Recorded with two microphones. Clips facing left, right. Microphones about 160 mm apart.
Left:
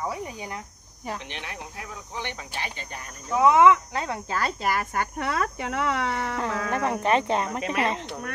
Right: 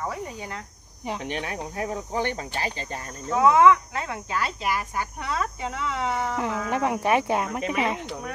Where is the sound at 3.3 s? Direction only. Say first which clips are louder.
Even; 25° left (ahead or behind); by 6.3 s 65° left (ahead or behind).